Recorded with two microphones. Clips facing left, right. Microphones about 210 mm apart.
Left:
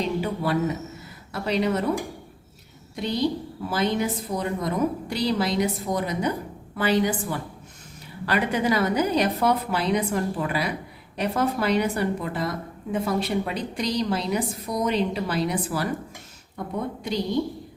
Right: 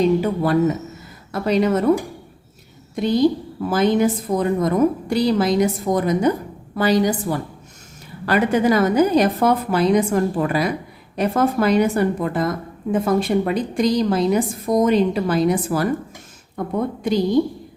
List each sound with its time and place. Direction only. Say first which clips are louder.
0.2 s a woman's voice: right 7 dB; 45° right (ahead or behind)
2.9 s a woman's voice: right 8 dB; 45° right (ahead or behind)